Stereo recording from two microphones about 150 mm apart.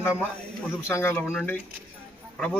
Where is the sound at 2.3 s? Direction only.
10° left (ahead or behind).